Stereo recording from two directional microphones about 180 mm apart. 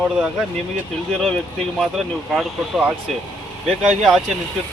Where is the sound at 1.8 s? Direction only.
Centre (ahead or behind).